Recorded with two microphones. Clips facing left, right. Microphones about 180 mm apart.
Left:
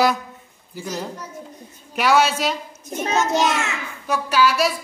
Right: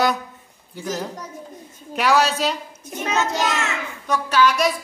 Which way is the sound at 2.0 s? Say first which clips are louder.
Left 1 dB; centre (ahead or behind).